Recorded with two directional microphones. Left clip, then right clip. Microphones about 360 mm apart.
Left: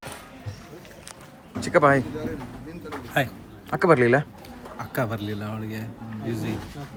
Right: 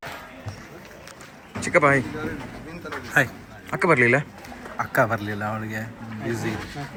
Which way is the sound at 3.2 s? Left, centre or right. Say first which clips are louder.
Right 5 dB; centre.